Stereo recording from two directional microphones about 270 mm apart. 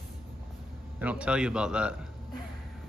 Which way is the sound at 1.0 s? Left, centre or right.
Centre.